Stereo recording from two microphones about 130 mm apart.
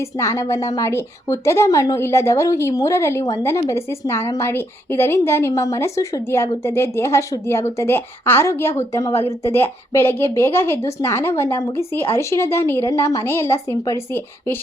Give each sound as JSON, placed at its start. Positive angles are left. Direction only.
{"t": 0.2, "sound": "a woman's voice", "side_deg": 20}